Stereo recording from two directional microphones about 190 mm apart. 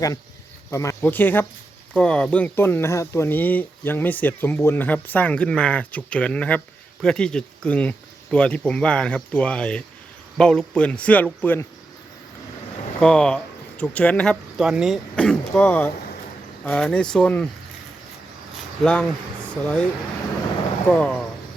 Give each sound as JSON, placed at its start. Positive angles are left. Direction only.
{"t": 0.7, "sound": "speech", "side_deg": 15}
{"t": 13.0, "sound": "speech", "side_deg": 5}
{"t": 18.8, "sound": "speech", "side_deg": 5}
{"t": 20.9, "sound": "speech", "side_deg": 5}